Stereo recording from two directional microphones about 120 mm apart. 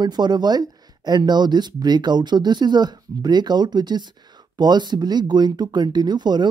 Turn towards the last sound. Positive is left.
turn(degrees=-35)  # may be behind; listen again after turning